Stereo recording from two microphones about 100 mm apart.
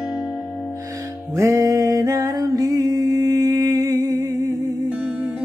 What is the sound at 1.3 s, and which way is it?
Music, 30° right (ahead or behind).